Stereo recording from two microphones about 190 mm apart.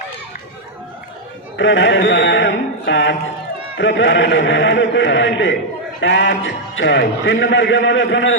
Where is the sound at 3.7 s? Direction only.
75° left (ahead or behind).